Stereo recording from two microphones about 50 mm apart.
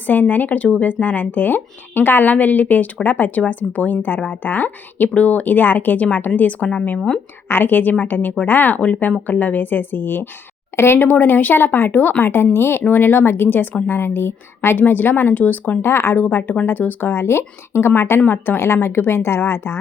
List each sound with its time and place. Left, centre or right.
0.1 s speech: left
7.4 s speech: left
15.8 s a woman's voice: left